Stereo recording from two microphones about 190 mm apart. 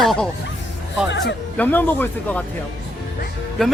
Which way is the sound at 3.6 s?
5° left (ahead or behind).